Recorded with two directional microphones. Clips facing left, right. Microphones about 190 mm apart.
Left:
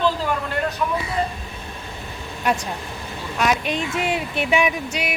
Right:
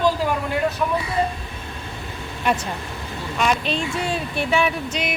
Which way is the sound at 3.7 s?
20° left (ahead or behind).